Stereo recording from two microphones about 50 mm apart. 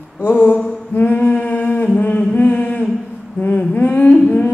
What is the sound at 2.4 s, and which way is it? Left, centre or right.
Humming, left.